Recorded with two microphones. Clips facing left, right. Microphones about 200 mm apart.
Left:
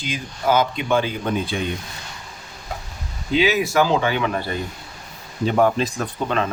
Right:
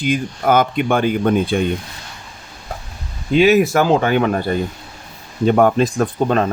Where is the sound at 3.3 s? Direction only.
50° right (ahead or behind).